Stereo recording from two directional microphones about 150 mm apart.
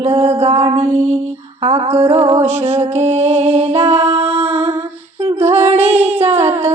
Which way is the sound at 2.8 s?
45° right (ahead or behind).